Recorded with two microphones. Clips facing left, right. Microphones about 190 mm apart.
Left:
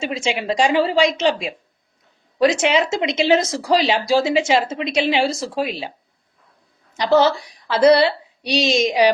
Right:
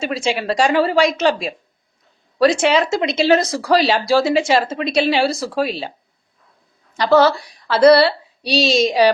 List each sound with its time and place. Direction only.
0.0 s a woman's voice: 20° left (ahead or behind)
6.9 s a woman's voice: 20° left (ahead or behind)